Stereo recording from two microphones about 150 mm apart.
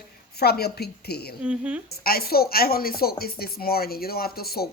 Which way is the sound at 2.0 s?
90° left.